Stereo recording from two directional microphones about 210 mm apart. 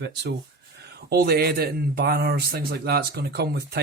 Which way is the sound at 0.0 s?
55° right (ahead or behind).